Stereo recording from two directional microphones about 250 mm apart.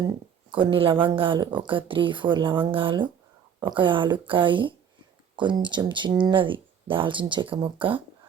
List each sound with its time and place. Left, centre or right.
0.5 s speech: right